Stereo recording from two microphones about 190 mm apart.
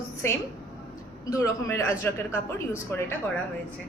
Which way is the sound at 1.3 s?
15° left (ahead or behind).